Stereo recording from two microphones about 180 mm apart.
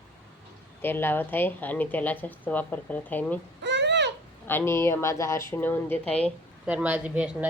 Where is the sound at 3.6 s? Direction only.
75° right (ahead or behind).